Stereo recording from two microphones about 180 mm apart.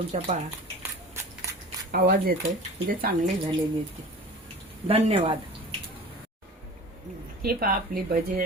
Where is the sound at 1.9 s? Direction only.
55° right (ahead or behind).